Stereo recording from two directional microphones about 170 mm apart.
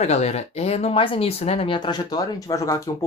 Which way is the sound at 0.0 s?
40° left (ahead or behind).